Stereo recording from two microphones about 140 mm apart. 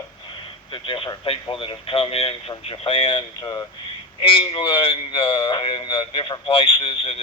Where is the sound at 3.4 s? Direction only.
25° left (ahead or behind).